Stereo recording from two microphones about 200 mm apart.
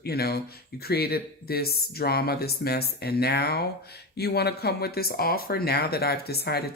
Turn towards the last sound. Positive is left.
turn(degrees=50)  # may be behind; listen again after turning